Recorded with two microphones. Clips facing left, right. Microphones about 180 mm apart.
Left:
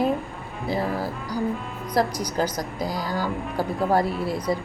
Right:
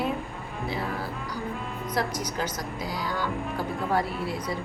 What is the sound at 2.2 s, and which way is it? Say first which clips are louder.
Speech: left 5 dB; 40° left (ahead or behind).